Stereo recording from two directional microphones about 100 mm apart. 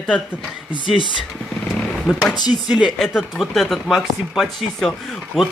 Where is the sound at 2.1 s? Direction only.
Centre (ahead or behind).